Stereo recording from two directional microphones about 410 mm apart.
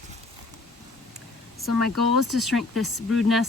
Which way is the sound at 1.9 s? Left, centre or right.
Right.